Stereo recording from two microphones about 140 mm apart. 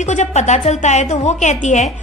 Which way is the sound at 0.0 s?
55° left (ahead or behind).